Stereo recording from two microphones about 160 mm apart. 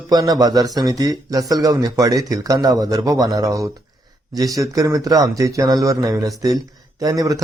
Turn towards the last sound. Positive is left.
turn(degrees=-20)  # may be behind; listen again after turning